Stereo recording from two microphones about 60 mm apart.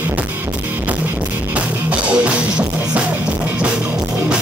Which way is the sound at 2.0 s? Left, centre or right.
Right.